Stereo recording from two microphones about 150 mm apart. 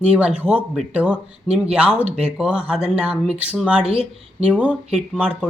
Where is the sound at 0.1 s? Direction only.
5° right (ahead or behind).